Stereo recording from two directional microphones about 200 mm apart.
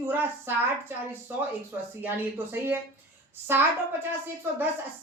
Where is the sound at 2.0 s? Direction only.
10° right (ahead or behind).